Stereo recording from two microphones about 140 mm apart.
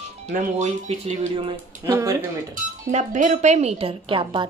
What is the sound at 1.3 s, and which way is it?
Speech, 40° right (ahead or behind).